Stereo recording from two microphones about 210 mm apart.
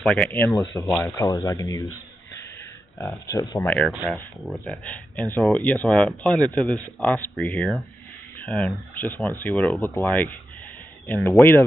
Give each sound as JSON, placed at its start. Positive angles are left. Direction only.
{"t": 0.0, "sound": "speech", "side_deg": 5}
{"t": 1.1, "sound": "speech", "side_deg": 15}
{"t": 3.1, "sound": "speech", "side_deg": 15}